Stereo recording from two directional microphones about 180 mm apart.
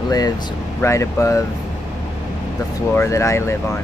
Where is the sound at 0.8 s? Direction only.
15° left (ahead or behind).